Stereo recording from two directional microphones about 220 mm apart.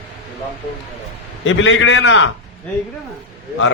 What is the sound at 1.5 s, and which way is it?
Speech, 60° left (ahead or behind).